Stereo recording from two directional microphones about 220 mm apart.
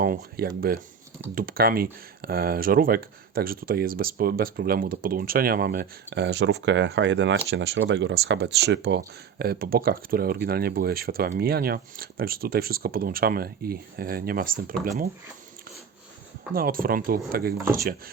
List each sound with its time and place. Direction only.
0.0 s speech: 40° right (ahead or behind)
16.6 s speech: 40° right (ahead or behind)